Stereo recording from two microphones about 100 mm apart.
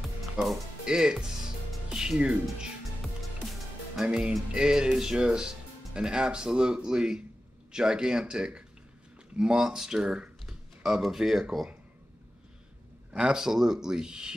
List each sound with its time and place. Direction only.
0.4 s speech: 5° right (ahead or behind)
3.0 s music: centre (ahead or behind)
5.9 s speech: 5° right (ahead or behind)
13.1 s speech: 5° right (ahead or behind)